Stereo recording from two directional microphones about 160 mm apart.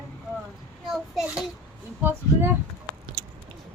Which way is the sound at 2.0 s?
15° right (ahead or behind).